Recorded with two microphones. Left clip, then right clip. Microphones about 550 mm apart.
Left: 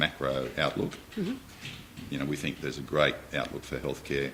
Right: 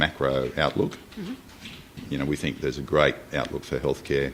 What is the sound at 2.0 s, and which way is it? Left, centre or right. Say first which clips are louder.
Speech: right 5 dB; right.